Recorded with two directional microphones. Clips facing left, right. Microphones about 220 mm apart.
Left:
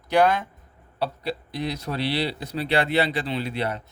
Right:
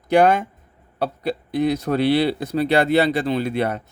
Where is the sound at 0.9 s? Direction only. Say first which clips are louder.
Right 4 dB; 50° right (ahead or behind).